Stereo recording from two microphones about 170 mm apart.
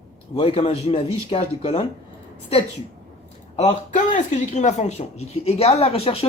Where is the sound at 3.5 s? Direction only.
45° left (ahead or behind).